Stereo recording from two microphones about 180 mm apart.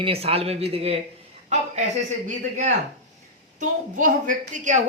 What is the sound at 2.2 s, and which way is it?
A man's voice, 40° right (ahead or behind).